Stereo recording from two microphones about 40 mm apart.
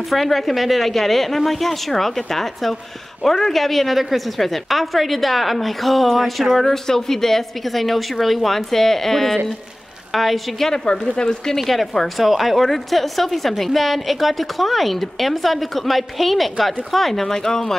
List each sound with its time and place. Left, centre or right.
0.1 s a woman's voice: centre
10.7 s speech: centre
11.5 s a woman's voice: centre